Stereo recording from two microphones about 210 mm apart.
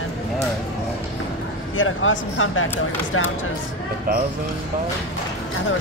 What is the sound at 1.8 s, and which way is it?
Speech, 70° left (ahead or behind).